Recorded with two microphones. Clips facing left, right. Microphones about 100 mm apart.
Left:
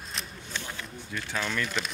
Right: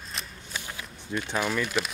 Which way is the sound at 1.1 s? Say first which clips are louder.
Right 4 dB; 20° right (ahead or behind).